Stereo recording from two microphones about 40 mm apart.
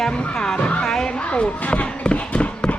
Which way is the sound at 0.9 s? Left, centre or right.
Centre.